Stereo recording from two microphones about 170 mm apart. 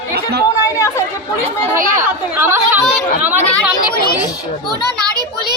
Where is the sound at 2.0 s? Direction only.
15° right (ahead or behind).